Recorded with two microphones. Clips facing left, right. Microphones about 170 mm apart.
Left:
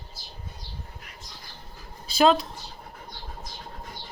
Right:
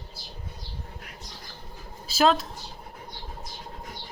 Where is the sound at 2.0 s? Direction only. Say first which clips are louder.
Left 2 dB; centre (ahead or behind).